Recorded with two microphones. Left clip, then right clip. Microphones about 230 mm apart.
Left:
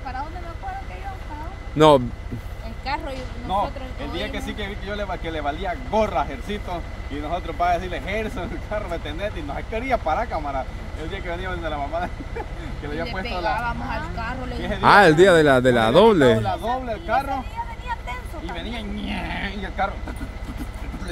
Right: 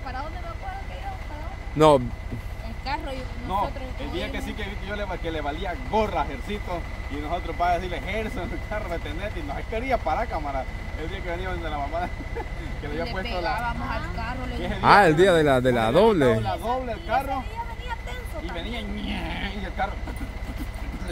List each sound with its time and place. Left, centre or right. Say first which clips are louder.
1.8 s speech: left 3 dB; centre
2.8 s a sound: left 3 dB; centre
4.4 s speech: left 3 dB; centre
18.7 s wild animals: left 2 dB; centre